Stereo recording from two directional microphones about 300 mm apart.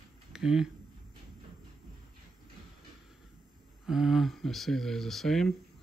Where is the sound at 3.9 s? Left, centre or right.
Centre.